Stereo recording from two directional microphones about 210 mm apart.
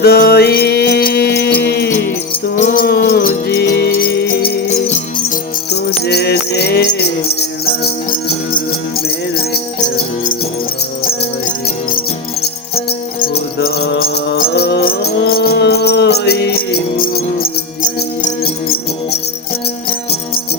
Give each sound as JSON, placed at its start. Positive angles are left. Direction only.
{"t": 0.0, "sound": "music", "side_deg": 50}
{"t": 5.7, "sound": "music", "side_deg": 50}
{"t": 11.0, "sound": "music", "side_deg": 45}
{"t": 13.1, "sound": "music", "side_deg": 45}